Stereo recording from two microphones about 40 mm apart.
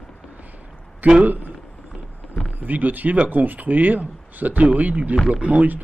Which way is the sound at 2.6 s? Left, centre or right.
Right.